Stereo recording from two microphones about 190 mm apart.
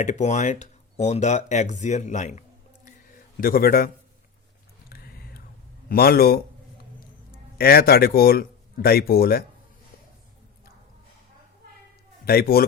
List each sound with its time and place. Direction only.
0.0 s speech: 40° left (ahead or behind)
2.8 s a sound: 50° left (ahead or behind)
4.9 s whispering: 55° left (ahead or behind)
5.9 s speech: 50° left (ahead or behind)
7.6 s speech: 55° left (ahead or behind)
12.2 s a man's voice: 55° left (ahead or behind)